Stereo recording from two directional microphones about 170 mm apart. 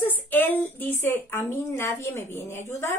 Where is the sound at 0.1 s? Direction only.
10° left (ahead or behind).